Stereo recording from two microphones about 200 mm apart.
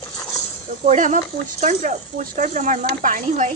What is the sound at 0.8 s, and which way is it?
Speech, 40° right (ahead or behind).